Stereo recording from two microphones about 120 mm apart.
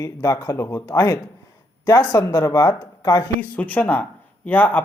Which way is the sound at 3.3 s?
10° left (ahead or behind).